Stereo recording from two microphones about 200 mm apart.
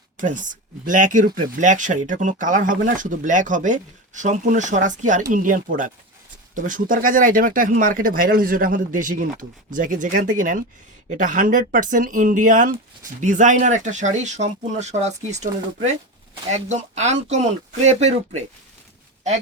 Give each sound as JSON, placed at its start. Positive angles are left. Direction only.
{"t": 0.2, "sound": "speech", "side_deg": -40}
{"t": 16.5, "sound": "speech", "side_deg": -35}